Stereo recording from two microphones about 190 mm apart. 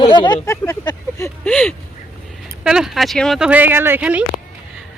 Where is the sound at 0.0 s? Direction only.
25° left (ahead or behind).